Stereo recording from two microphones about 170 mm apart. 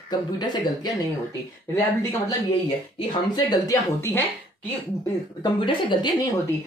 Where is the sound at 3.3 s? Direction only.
20° left (ahead or behind).